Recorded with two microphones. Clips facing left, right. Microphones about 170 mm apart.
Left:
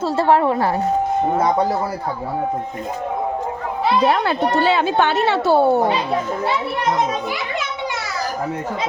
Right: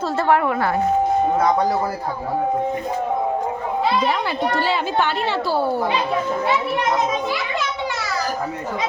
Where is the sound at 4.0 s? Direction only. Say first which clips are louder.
Left 4 dB; 60° left (ahead or behind).